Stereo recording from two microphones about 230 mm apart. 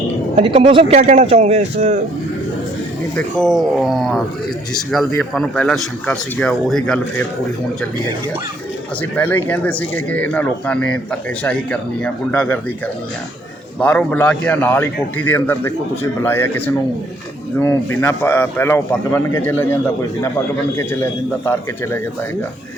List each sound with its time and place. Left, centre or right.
0.3 s speech: right
3.2 s speech: centre
9.0 s a man's voice: centre
13.7 s a man's voice: centre